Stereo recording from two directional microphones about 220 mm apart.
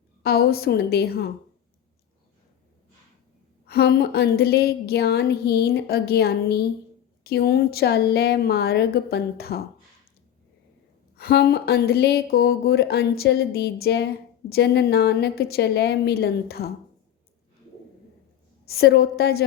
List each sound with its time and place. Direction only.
0.2 s a woman's voice: 45° left (ahead or behind)
3.7 s a woman's voice: 45° left (ahead or behind)
11.2 s a woman's voice: 45° left (ahead or behind)
18.6 s a woman's voice: 45° left (ahead or behind)